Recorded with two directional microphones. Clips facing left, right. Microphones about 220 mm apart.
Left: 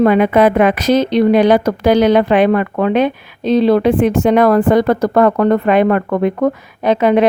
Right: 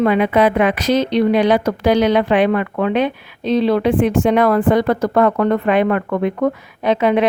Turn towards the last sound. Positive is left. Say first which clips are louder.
# left 3 dB
turn(degrees=45)  # may be behind; listen again after turning